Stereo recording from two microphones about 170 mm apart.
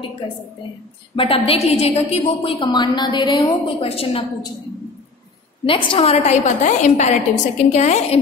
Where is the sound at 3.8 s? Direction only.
35° left (ahead or behind).